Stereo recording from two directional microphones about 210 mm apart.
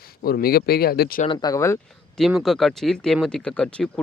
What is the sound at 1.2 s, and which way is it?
Speech, 20° left (ahead or behind).